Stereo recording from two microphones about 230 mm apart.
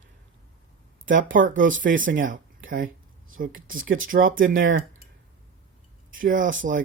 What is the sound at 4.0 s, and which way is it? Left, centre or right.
Speech, right.